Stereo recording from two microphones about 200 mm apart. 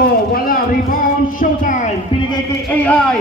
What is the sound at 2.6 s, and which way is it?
Speech, 5° left (ahead or behind).